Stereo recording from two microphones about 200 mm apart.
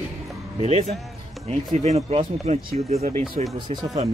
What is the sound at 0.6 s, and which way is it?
Speech, 30° right (ahead or behind).